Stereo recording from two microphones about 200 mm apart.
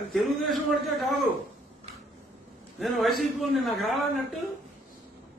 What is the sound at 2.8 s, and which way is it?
A man's voice, centre (ahead or behind).